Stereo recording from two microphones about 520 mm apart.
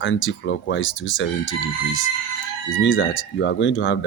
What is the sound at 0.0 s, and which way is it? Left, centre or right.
Speech, left.